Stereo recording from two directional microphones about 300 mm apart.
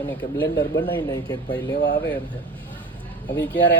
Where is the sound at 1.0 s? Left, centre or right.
Centre.